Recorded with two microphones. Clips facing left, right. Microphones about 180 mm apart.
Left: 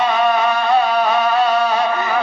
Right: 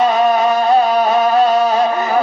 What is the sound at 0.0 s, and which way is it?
Music, 40° right (ahead or behind).